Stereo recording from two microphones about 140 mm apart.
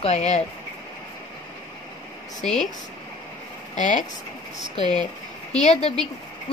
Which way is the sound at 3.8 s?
65° left (ahead or behind).